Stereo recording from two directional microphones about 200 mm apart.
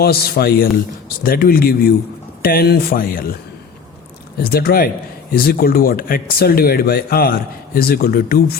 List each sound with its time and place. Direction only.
0.0 s speech: 50° left (ahead or behind)
4.5 s speech: 50° left (ahead or behind)